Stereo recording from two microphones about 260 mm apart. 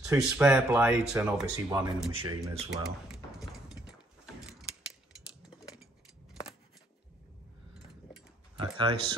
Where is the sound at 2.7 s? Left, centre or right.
Centre.